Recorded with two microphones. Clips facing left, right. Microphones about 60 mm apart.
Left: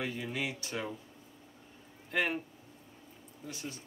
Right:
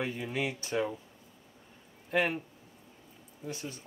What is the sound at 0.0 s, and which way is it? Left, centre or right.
Speech, right.